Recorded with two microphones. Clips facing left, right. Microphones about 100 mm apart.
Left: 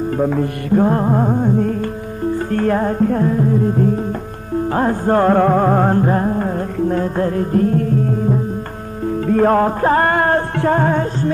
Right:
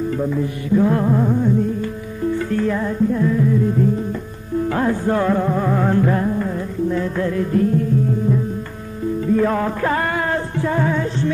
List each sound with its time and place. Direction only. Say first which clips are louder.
0.2 s music: left 4 dB; 60° left (ahead or behind)
0.8 s music: left 2 dB; 40° left (ahead or behind)
2.3 s music: left 4 dB; 55° left (ahead or behind)
3.3 s music: left 1 dB; 45° left (ahead or behind)
9.3 s music: left 5 dB; 50° left (ahead or behind)